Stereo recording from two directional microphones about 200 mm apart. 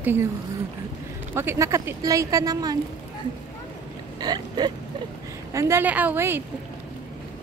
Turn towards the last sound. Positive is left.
turn(degrees=-10)  # may be behind; listen again after turning